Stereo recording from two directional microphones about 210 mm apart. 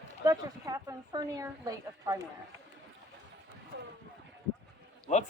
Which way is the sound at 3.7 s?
60° right (ahead or behind).